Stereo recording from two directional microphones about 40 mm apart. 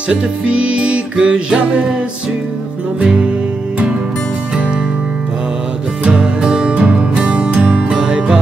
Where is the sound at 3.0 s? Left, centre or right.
Right.